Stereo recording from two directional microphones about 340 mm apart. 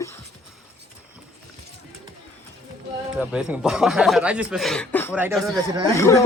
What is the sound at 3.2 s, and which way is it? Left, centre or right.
Speech, centre.